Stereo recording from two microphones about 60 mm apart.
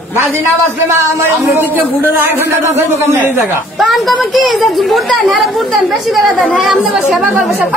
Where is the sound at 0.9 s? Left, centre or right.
Right.